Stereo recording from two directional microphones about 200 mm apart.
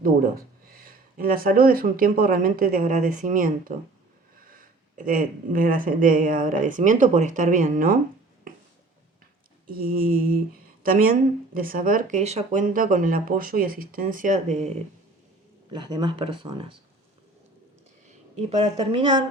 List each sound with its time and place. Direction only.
0.0 s speech: 45° right (ahead or behind)
9.6 s speech: 45° right (ahead or behind)
15.7 s speech: 20° right (ahead or behind)
18.3 s speech: 30° right (ahead or behind)